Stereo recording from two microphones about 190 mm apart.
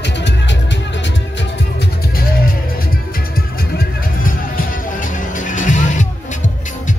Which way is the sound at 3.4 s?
50° left (ahead or behind).